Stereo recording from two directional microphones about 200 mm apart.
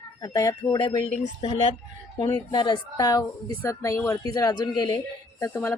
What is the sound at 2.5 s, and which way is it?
A woman's voice, 20° left (ahead or behind).